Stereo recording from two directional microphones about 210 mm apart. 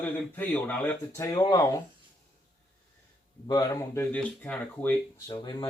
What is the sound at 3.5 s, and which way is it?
Speech, 15° left (ahead or behind).